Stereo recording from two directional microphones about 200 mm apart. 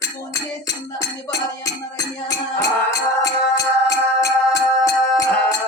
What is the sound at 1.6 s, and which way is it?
Music, 15° left (ahead or behind).